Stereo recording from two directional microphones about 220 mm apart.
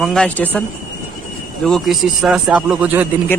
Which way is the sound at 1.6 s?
Centre (ahead or behind).